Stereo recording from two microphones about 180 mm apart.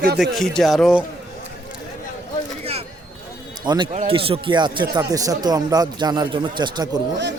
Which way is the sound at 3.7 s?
25° right (ahead or behind).